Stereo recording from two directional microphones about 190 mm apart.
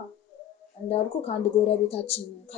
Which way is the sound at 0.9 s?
30° left (ahead or behind).